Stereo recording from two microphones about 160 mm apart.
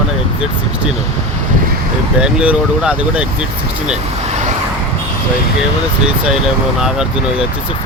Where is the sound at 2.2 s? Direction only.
5° right (ahead or behind).